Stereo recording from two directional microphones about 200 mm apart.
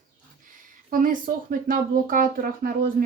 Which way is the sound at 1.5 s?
45° right (ahead or behind).